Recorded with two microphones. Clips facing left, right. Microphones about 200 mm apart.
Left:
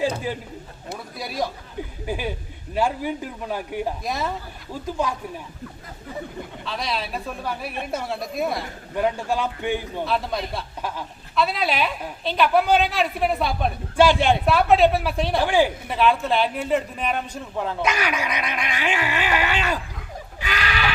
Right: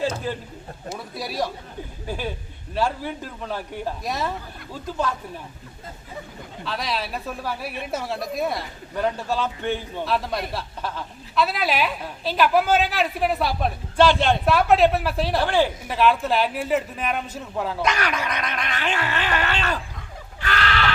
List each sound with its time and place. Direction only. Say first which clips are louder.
0.3 s a man's voice: even; 15° left (ahead or behind)
1.1 s a woman's voice: even; centre (ahead or behind)
2.0 s a man's voice: left 1 dB; 15° left (ahead or behind)
4.0 s a woman's voice: even; centre (ahead or behind)
4.7 s a man's voice: left 1 dB; 10° left (ahead or behind)
6.7 s a woman's voice: right 1 dB; centre (ahead or behind)
9.0 s a man's voice: left 1 dB; 10° left (ahead or behind)
10.1 s a woman's voice: right 1 dB; centre (ahead or behind)
13.9 s a man's voice: left 1 dB; 10° left (ahead or behind)
14.4 s a woman's voice: even; centre (ahead or behind)
15.4 s a man's voice: left 2 dB; 10° left (ahead or behind)
15.9 s a man's voice: even; centre (ahead or behind)
20.4 s a sound: right 2 dB; 10° left (ahead or behind)